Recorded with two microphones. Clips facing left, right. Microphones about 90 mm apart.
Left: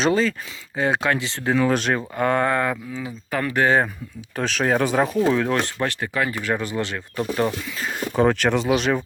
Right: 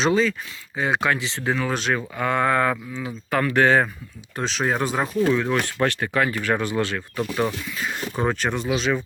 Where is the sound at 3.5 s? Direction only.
20° left (ahead or behind).